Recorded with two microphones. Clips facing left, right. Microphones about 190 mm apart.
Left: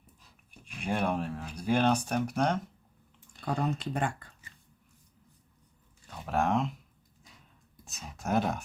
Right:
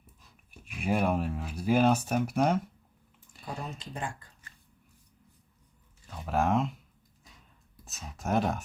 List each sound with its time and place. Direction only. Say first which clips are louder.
0.6 s speech: right 3 dB; 5° right (ahead or behind)
3.4 s speech: left 8 dB; 65° left (ahead or behind)
6.1 s speech: right 1 dB; centre (ahead or behind)
7.9 s speech: right 1 dB; centre (ahead or behind)